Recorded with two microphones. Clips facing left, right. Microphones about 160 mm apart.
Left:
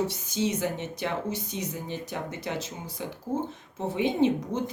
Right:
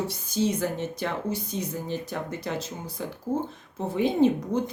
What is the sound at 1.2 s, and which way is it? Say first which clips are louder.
Speech: right 2 dB; 40° right (ahead or behind).